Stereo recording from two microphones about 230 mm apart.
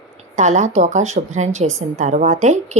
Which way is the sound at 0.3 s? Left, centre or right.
Right.